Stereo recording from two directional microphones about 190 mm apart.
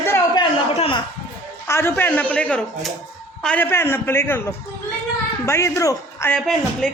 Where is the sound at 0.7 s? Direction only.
30° left (ahead or behind).